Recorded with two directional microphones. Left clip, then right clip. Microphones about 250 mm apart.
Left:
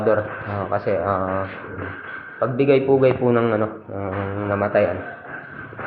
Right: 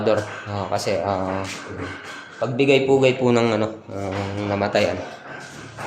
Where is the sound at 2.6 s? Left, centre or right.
Right.